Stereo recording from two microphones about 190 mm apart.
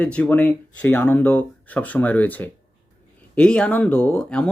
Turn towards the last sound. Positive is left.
turn(degrees=5)  # may be behind; listen again after turning